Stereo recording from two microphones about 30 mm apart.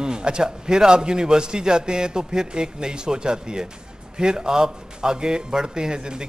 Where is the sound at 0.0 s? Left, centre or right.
Right.